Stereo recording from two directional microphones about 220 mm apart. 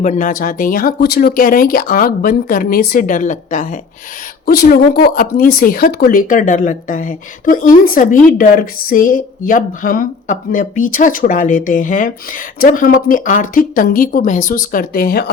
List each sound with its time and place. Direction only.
0.0 s speech: 35° left (ahead or behind)